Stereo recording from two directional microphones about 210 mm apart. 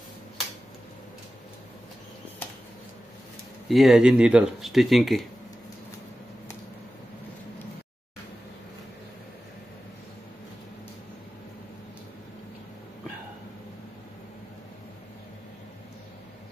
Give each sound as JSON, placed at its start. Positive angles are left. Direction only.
{"t": 3.6, "sound": "speech", "side_deg": 0}